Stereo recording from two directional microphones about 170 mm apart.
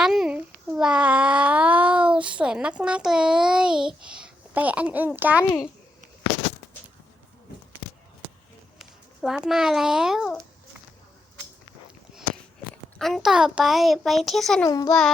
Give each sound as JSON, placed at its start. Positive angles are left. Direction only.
{"t": 0.0, "sound": "a child's voice", "side_deg": -5}
{"t": 8.8, "sound": "a child's voice", "side_deg": -5}
{"t": 13.0, "sound": "a child's voice", "side_deg": 0}
{"t": 14.6, "sound": "a child's voice", "side_deg": 20}